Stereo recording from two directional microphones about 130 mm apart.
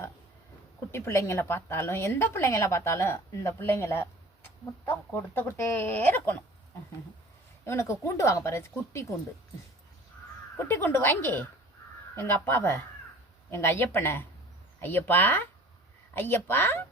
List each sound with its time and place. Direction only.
0.9 s speech: 20° left (ahead or behind)
7.6 s speech: 20° left (ahead or behind)
10.6 s speech: 20° left (ahead or behind)